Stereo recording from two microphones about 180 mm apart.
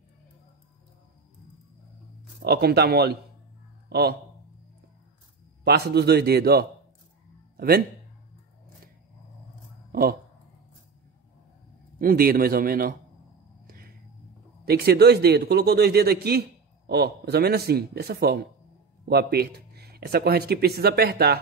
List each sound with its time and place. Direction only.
2.4 s a man's voice: 65° right (ahead or behind)
5.6 s a man's voice: 65° right (ahead or behind)
12.0 s a man's voice: 55° right (ahead or behind)
13.7 s a sound: 55° right (ahead or behind)
14.6 s a man's voice: 60° right (ahead or behind)